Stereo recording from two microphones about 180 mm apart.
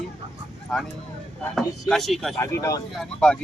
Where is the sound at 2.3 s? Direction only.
15° left (ahead or behind).